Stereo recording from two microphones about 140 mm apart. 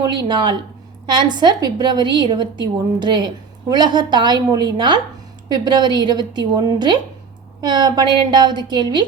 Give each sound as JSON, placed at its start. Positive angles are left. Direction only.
{"t": 0.0, "sound": "a woman's voice", "side_deg": -30}